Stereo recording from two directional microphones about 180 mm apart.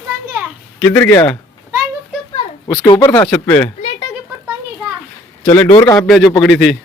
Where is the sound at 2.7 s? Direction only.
20° left (ahead or behind).